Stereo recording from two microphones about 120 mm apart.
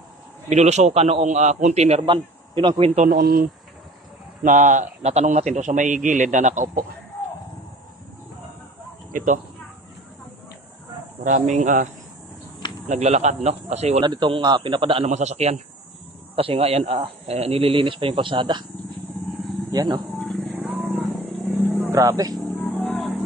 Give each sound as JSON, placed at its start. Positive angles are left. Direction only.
{"t": 0.5, "sound": "a man's voice", "side_deg": -70}
{"t": 2.0, "sound": "a man's voice", "side_deg": -45}
{"t": 4.5, "sound": "a man's voice", "side_deg": -90}
{"t": 9.1, "sound": "speech", "side_deg": -90}
{"t": 11.2, "sound": "a man's voice", "side_deg": -90}
{"t": 12.8, "sound": "speech", "side_deg": -70}
{"t": 14.0, "sound": "speech", "side_deg": -40}
{"t": 15.0, "sound": "a man's voice", "side_deg": -70}
{"t": 16.3, "sound": "speech", "side_deg": -55}
{"t": 19.7, "sound": "speech", "side_deg": -35}
{"t": 20.1, "sound": "vehicle", "side_deg": 5}
{"t": 21.9, "sound": "speech", "side_deg": -30}
{"t": 22.6, "sound": "music", "side_deg": 5}